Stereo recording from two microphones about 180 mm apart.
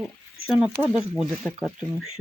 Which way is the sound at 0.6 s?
5° right (ahead or behind).